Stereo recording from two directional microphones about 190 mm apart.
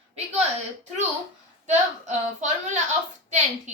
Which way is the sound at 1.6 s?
40° right (ahead or behind).